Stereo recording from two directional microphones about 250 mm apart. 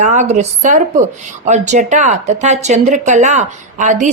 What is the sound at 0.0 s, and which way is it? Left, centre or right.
A woman's voice, right.